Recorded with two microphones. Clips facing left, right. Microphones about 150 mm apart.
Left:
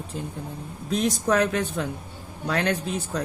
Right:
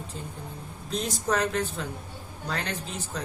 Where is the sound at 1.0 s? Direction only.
60° left (ahead or behind).